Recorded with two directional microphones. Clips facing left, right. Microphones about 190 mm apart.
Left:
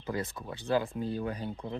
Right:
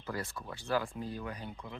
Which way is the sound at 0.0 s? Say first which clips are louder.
Left 4 dB; 20° left (ahead or behind).